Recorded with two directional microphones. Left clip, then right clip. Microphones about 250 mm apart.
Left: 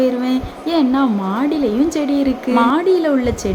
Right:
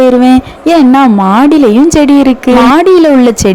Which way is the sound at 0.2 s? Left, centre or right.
Right.